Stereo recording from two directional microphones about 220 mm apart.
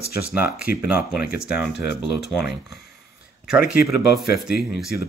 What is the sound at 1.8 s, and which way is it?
Speech, 50° left (ahead or behind).